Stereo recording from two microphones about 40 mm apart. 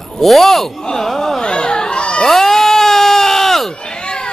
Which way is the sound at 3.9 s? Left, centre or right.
Left.